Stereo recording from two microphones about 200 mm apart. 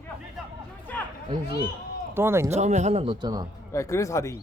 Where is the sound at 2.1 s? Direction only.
10° right (ahead or behind).